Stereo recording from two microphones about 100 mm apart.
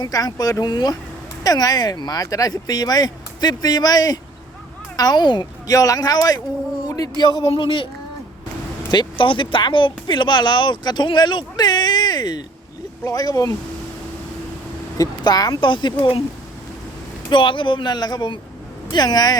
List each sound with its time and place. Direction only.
0.0 s speech: 40° left (ahead or behind)
6.8 s a sound: 40° left (ahead or behind)
7.2 s speech: 45° left (ahead or behind)
7.4 s speech: 60° left (ahead or behind)
8.9 s speech: 50° left (ahead or behind)
14.9 s speech: 40° left (ahead or behind)
15.7 s speech: 55° left (ahead or behind)
17.2 s speech: 55° left (ahead or behind)